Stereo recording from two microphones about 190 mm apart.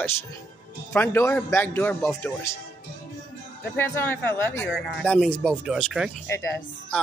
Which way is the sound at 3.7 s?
10° left (ahead or behind).